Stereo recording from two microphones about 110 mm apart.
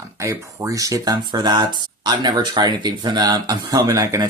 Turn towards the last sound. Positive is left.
turn(degrees=-30)  # may be behind; listen again after turning